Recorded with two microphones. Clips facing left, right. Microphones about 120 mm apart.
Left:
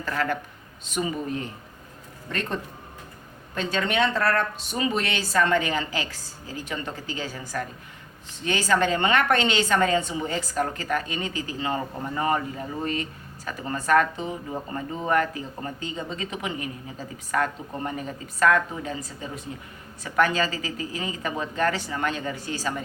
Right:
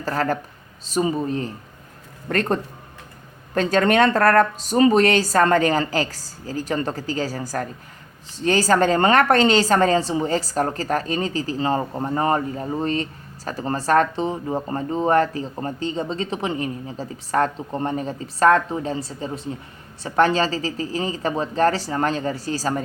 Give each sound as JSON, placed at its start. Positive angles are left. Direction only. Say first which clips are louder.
{"t": 0.0, "sound": "a woman's voice", "louder": "right 4 dB", "side_deg": -40}
{"t": 2.3, "sound": "a woman's voice", "louder": "right 8 dB", "side_deg": -45}